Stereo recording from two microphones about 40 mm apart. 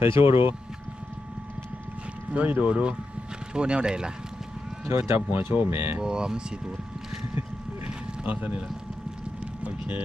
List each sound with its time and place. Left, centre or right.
0.0 s speech: right
2.3 s speech: right
4.9 s speech: right
6.0 s speech: centre
8.2 s speech: right